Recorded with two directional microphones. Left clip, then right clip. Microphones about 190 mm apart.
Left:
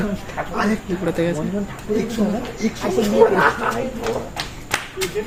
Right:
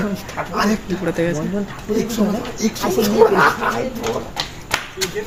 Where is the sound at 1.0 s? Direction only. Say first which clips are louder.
Right 1 dB; centre (ahead or behind).